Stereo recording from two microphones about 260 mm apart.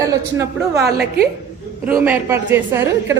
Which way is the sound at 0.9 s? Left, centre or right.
Right.